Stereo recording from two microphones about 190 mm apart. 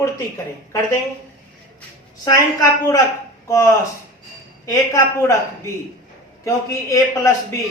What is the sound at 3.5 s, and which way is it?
A man's voice, 15° left (ahead or behind).